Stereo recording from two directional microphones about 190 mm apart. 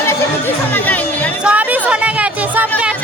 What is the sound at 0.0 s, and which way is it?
Chatter, 10° left (ahead or behind).